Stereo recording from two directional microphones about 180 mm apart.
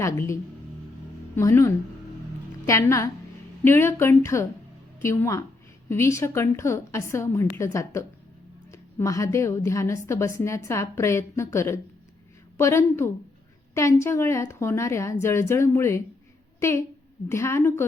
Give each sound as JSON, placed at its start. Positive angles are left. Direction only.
{"t": 0.0, "sound": "a woman's voice", "side_deg": 15}
{"t": 1.4, "sound": "a woman's voice", "side_deg": 15}